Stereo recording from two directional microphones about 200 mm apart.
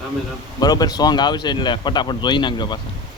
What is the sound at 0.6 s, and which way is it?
Speech, 20° left (ahead or behind).